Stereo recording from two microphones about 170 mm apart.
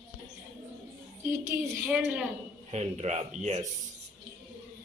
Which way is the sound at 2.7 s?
40° right (ahead or behind).